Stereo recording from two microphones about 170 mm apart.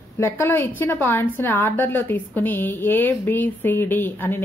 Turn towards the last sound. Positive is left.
turn(degrees=10)  # may be behind; listen again after turning